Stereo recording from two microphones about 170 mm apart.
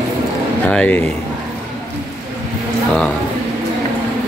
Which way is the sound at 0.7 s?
10° left (ahead or behind).